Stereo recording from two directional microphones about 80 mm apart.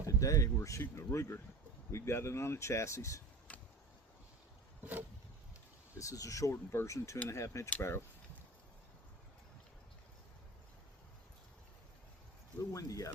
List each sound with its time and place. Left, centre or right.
0.0 s speech: left
3.5 s a sound: centre
4.8 s vehicle: right
5.9 s speech: left
12.7 s speech: left